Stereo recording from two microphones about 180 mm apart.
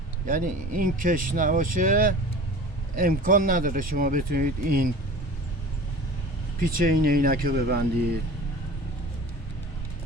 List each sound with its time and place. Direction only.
0.3 s speech: 50° right (ahead or behind)
6.6 s speech: 50° right (ahead or behind)